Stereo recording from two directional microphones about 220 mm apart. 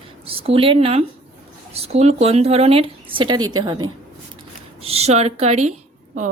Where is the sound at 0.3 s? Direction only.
25° right (ahead or behind).